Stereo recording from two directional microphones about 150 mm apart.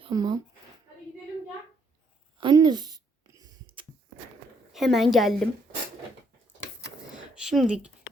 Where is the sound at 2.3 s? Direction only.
30° right (ahead or behind).